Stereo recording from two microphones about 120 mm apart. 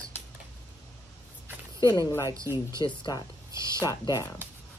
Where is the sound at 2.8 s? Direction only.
40° left (ahead or behind).